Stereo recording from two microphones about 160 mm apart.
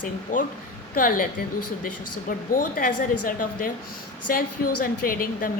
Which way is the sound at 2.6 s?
60° left (ahead or behind).